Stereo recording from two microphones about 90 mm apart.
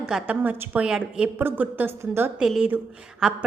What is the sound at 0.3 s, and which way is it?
A woman's voice, 20° right (ahead or behind).